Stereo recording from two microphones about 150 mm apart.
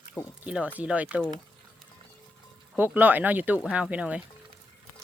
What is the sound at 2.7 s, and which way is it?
Speech, 10° right (ahead or behind).